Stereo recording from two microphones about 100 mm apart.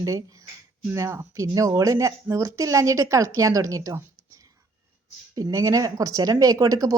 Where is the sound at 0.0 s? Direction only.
40° right (ahead or behind).